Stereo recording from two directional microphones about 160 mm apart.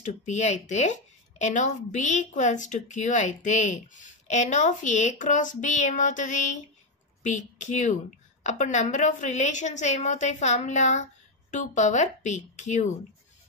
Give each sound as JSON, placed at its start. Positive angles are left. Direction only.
{"t": 0.0, "sound": "a woman's voice", "side_deg": 45}